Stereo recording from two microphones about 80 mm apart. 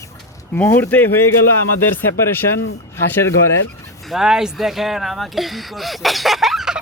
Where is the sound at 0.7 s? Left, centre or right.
Left.